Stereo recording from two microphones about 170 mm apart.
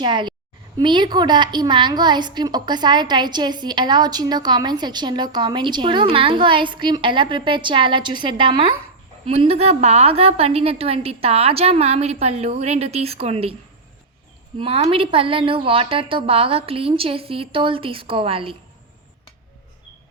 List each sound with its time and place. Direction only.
0.0 s a woman's voice: 25° right (ahead or behind)
14.6 s a woman's voice: 35° right (ahead or behind)